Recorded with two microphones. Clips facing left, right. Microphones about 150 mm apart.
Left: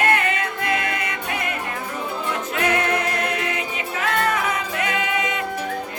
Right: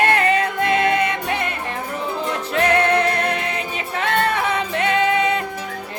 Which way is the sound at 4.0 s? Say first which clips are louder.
Right 2 dB; 30° right (ahead or behind).